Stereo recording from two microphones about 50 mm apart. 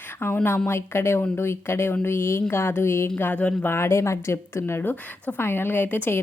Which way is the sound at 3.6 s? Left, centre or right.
Left.